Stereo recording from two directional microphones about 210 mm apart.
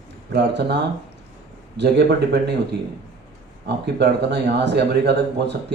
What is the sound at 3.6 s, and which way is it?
Speech, 55° right (ahead or behind).